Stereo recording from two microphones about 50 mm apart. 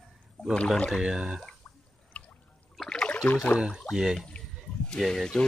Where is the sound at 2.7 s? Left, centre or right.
Centre.